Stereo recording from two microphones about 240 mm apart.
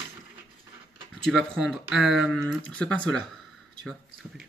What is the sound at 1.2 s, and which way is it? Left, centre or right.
Speech, centre.